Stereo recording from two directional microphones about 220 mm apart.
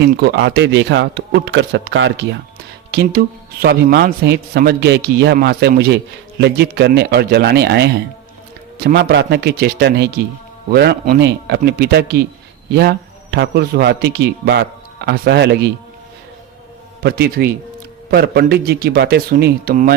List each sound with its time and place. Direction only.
0.0 s a man's voice: 50° right (ahead or behind)
17.0 s a man's voice: 45° right (ahead or behind)